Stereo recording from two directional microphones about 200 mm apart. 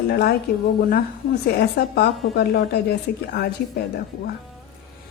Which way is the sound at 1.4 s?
55° left (ahead or behind).